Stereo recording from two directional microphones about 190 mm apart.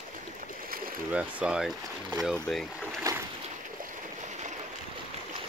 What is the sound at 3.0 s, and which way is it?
Boat, 15° right (ahead or behind).